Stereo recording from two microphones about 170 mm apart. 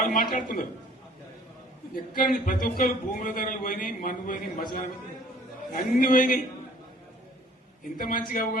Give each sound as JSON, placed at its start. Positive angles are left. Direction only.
{"t": 0.0, "sound": "speech", "side_deg": 55}
{"t": 2.0, "sound": "a man's voice", "side_deg": 55}
{"t": 7.9, "sound": "speech", "side_deg": 55}